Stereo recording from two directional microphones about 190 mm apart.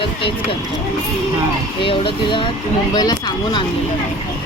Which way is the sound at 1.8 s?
25° left (ahead or behind).